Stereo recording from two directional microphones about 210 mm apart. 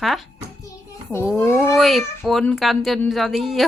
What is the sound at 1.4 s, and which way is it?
Speech, 10° left (ahead or behind).